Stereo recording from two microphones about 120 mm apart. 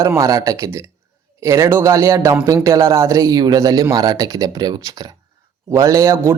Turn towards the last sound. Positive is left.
turn(degrees=-20)  # may be behind; listen again after turning